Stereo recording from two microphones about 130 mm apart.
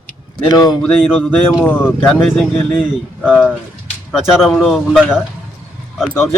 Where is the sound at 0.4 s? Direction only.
30° left (ahead or behind).